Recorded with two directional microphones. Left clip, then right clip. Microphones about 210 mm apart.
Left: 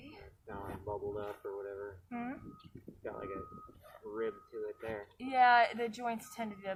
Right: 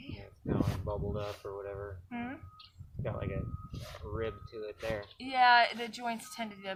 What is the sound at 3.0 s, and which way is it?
Speech, 25° right (ahead or behind).